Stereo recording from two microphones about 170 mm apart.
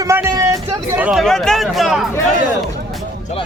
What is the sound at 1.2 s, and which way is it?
Speech, 5° left (ahead or behind).